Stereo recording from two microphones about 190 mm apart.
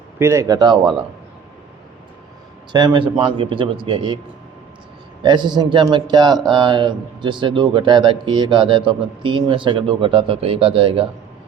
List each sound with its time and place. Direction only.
0.2 s speech: 15° right (ahead or behind)
2.7 s speech: 25° right (ahead or behind)
5.2 s speech: 25° right (ahead or behind)